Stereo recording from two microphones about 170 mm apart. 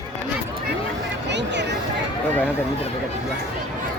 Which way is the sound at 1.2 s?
90° right.